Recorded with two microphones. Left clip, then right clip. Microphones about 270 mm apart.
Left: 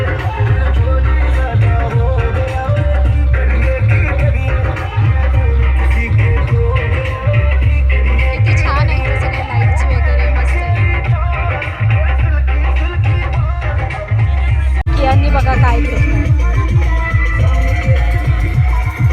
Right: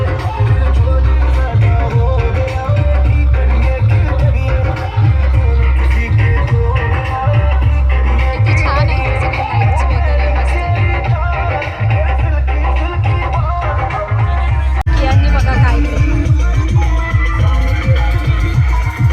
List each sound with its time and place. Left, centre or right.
1.8 s music: left
6.7 s music: centre
8.4 s music: centre
10.8 s music: right
15.0 s music: centre